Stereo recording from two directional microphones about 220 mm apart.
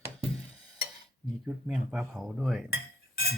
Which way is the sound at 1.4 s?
5° right (ahead or behind).